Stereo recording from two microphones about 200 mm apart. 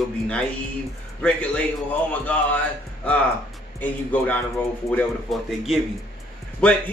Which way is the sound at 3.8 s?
10° left (ahead or behind).